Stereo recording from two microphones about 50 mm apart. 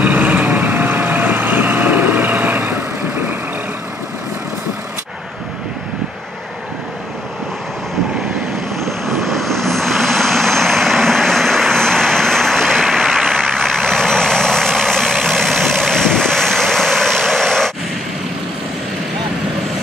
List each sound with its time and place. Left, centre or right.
0.0 s vehicle: right
0.5 s vehicle: right
8.7 s vehicle: centre